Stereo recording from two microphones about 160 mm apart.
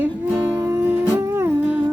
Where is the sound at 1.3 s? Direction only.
15° right (ahead or behind).